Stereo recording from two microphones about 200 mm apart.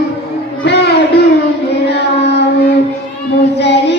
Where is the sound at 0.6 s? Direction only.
55° left (ahead or behind).